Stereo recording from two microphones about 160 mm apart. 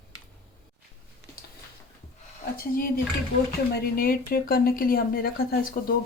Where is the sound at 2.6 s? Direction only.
65° left (ahead or behind).